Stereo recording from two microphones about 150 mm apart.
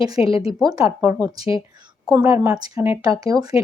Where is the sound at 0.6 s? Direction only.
25° right (ahead or behind).